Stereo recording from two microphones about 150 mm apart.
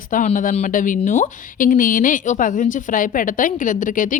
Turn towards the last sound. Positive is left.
turn(degrees=60)  # may be behind; listen again after turning